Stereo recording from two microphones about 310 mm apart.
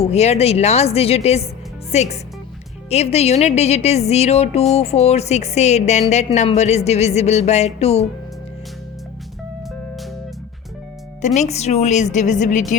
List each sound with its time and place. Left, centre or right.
0.0 s a woman's voice: left
11.3 s a woman's voice: left